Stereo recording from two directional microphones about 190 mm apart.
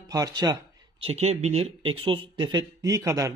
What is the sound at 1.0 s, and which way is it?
Speech, 35° right (ahead or behind).